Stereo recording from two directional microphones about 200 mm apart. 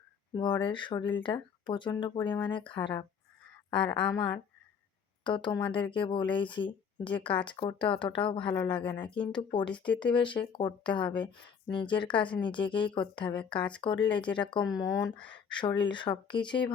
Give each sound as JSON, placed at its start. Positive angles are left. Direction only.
{"t": 0.3, "sound": "speech", "side_deg": 25}
{"t": 9.7, "sound": "speech", "side_deg": 5}
{"t": 10.0, "sound": "speech", "side_deg": 25}